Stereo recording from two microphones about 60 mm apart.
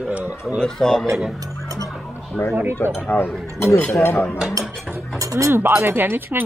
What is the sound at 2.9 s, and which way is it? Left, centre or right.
Speech, left.